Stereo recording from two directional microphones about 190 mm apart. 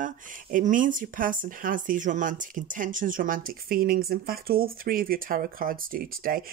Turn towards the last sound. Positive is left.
turn(degrees=-50)  # may be behind; listen again after turning